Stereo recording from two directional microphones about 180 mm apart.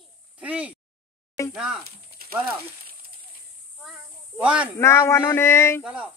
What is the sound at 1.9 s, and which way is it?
Snake, 55° right (ahead or behind).